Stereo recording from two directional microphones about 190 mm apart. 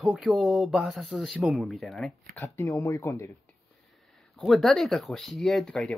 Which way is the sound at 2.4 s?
10° left (ahead or behind).